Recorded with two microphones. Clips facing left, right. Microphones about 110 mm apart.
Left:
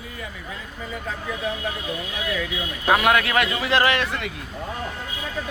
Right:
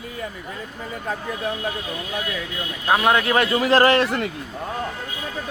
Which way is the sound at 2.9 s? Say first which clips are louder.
Right 1 dB; 25° right (ahead or behind).